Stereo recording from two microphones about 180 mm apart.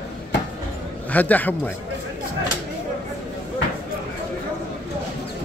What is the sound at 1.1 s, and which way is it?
Speech, 10° left (ahead or behind).